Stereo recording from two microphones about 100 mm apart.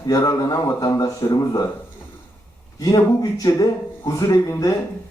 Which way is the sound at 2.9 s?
40° left (ahead or behind).